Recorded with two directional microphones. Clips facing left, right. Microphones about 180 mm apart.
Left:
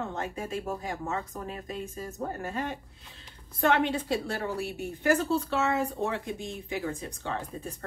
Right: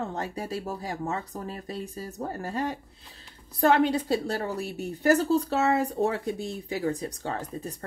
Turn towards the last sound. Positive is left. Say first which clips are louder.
# right 2 dB
turn(degrees=-40)  # may be behind; listen again after turning